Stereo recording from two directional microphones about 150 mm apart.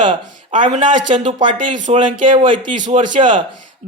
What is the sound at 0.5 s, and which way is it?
Speech, 55° right (ahead or behind).